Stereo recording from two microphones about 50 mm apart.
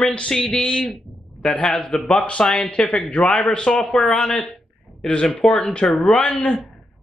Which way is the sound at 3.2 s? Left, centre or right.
Centre.